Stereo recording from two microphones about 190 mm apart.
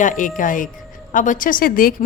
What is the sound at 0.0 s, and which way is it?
A woman's voice, 40° left (ahead or behind).